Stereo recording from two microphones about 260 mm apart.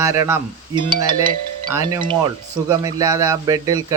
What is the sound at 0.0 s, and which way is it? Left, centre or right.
Speech, centre.